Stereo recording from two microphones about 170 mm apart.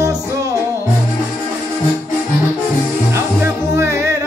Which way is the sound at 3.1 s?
15° right (ahead or behind).